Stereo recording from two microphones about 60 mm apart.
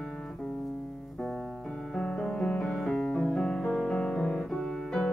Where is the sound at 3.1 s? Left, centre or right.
Centre.